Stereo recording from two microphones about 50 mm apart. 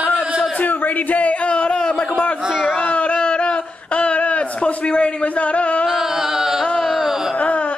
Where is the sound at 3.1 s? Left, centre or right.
Centre.